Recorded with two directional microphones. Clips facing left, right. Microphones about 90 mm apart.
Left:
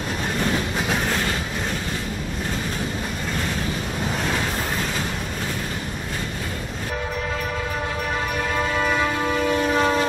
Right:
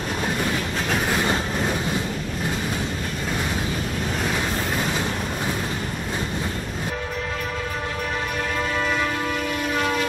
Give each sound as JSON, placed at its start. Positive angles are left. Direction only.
{"t": 9.8, "sound": "train", "side_deg": 30}